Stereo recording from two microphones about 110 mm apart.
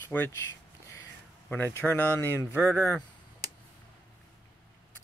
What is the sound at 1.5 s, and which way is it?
Speech, 20° left (ahead or behind).